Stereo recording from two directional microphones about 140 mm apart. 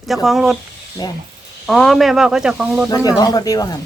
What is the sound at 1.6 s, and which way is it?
Speech, centre (ahead or behind).